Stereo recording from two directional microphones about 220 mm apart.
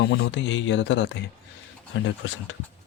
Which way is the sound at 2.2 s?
60° left (ahead or behind).